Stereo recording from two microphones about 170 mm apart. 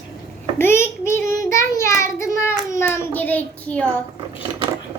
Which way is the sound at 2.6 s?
15° left (ahead or behind).